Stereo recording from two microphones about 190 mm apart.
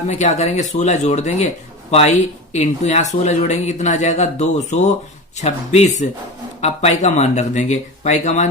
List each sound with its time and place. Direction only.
0.1 s speech: 35° left (ahead or behind)